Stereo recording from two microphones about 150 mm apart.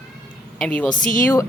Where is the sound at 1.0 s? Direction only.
60° left (ahead or behind).